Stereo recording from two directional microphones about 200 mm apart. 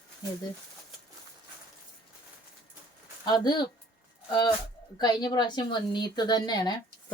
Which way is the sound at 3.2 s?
20° left (ahead or behind).